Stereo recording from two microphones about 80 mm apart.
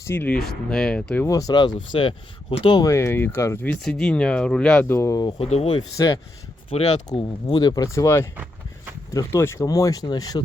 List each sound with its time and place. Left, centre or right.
0.0 s speech: left
0.3 s speech: centre
1.3 s speech: left
1.5 s speech: left
2.8 s speech: left
3.8 s speech: centre
4.8 s speech: left
5.1 s speech: left
6.9 s speech: left
7.6 s speech: left
7.9 s speech: left
9.4 s speech: left
9.6 s speech: left